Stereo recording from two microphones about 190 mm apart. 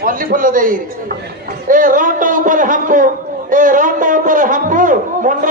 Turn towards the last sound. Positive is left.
turn(degrees=-45)  # may be behind; listen again after turning